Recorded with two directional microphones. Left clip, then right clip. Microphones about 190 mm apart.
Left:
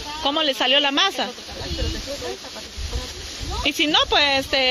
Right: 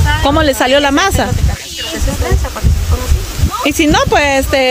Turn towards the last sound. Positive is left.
turn(degrees=-15)  # may be behind; listen again after turning